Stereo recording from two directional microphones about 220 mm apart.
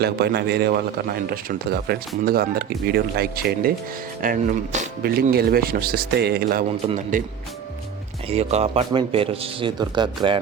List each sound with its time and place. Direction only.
0.0 s a man's voice: 45° right (ahead or behind)
8.3 s speech: 30° right (ahead or behind)